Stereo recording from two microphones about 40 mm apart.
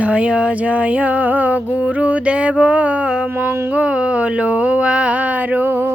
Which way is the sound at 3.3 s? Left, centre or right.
Right.